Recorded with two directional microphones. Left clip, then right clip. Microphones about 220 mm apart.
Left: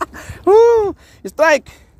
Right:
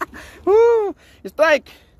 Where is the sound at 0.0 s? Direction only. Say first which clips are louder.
Left 5 dB; 10° left (ahead or behind).